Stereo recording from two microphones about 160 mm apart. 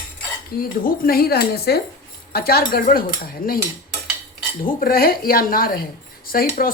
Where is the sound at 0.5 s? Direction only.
65° left (ahead or behind).